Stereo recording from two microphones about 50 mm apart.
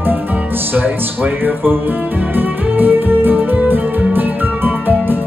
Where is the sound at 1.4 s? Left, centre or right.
Right.